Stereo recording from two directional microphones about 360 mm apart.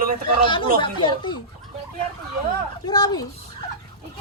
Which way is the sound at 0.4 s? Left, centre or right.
Centre.